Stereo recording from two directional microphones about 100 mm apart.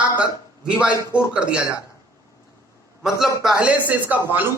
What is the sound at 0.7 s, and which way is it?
Speech, 10° right (ahead or behind).